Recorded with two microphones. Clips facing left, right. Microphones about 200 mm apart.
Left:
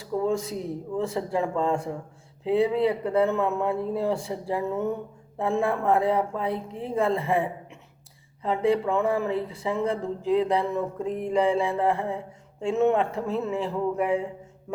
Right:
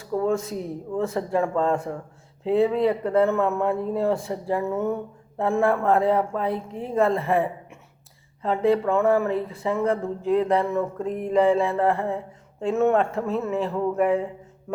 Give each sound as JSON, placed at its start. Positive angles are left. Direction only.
{"t": 0.0, "sound": "speech", "side_deg": 15}